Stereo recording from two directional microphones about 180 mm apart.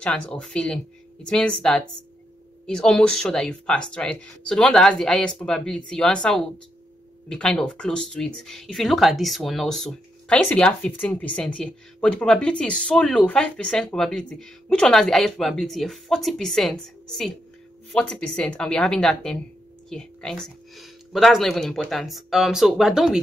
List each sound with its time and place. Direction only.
0.0 s speech: 5° left (ahead or behind)